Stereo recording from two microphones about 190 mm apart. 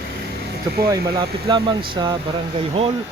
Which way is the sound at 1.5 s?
25° right (ahead or behind).